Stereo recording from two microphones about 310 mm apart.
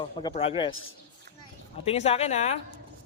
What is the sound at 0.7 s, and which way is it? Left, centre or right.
Speech, left.